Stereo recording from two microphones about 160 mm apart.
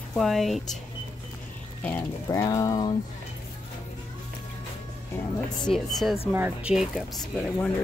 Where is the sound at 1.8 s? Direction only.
10° left (ahead or behind).